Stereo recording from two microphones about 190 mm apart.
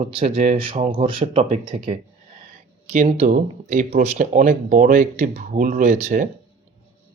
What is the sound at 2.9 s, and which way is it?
Speech, 40° right (ahead or behind).